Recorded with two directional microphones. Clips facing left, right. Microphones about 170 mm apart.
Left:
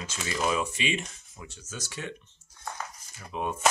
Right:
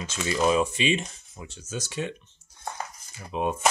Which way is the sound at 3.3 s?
20° right (ahead or behind).